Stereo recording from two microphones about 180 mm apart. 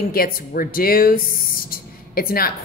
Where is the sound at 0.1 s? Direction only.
55° left (ahead or behind).